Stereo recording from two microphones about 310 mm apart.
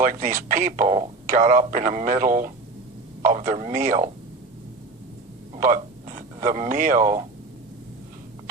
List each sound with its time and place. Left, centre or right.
0.0 s speech: right
5.5 s speech: right